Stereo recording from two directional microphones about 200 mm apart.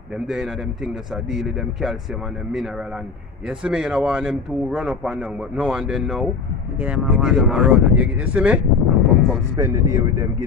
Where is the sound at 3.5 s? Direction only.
5° right (ahead or behind).